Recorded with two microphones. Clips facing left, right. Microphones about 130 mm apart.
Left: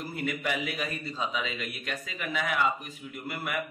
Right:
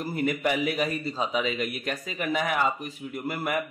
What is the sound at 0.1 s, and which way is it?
A man's voice, 35° right (ahead or behind).